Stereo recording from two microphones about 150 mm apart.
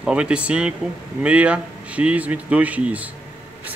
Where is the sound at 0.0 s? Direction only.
10° right (ahead or behind).